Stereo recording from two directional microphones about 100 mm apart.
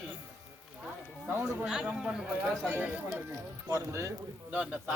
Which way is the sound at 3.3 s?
30° right (ahead or behind).